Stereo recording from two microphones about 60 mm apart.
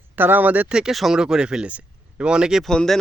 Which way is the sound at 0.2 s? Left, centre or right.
Right.